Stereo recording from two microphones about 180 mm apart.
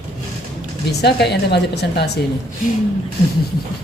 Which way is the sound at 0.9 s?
65° left (ahead or behind).